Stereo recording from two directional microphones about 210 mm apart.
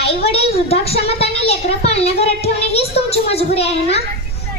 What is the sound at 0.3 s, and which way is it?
A child's voice, 30° left (ahead or behind).